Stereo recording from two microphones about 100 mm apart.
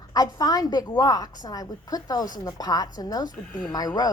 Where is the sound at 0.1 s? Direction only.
40° left (ahead or behind).